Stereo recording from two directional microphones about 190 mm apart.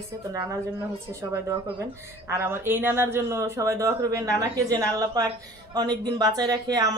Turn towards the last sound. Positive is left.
turn(degrees=-20)  # may be behind; listen again after turning